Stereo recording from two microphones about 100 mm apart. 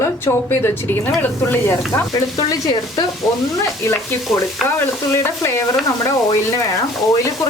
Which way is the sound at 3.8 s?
25° left (ahead or behind).